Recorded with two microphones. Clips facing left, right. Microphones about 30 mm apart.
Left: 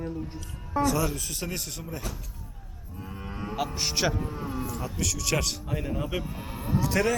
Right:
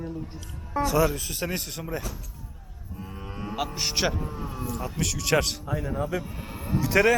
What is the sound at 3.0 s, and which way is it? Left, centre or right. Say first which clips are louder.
Cattle: even; centre.